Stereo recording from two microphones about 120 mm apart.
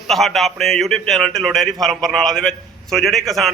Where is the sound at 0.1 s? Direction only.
Centre (ahead or behind).